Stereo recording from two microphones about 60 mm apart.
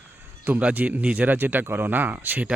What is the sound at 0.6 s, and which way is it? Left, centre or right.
Speech, right.